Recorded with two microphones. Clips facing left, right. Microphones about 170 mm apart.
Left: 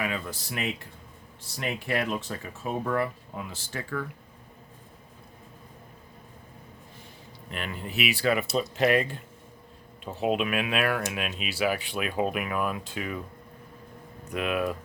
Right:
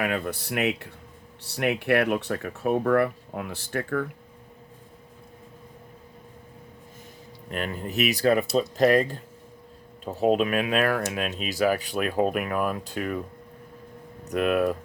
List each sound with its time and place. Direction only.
0.0 s speech: 60° right (ahead or behind)
7.5 s speech: 45° right (ahead or behind)
14.3 s speech: 45° right (ahead or behind)